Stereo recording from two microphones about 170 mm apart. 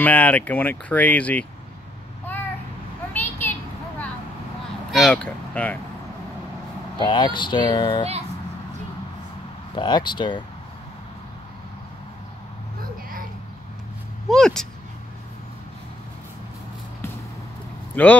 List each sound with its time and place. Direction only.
0.0 s speech: 10° left (ahead or behind)
3.1 s a sound: 10° left (ahead or behind)
4.9 s speech: 5° left (ahead or behind)
7.0 s speech: 25° left (ahead or behind)
9.8 s speech: 25° left (ahead or behind)
14.3 s speech: 5° left (ahead or behind)
18.0 s speech: 10° left (ahead or behind)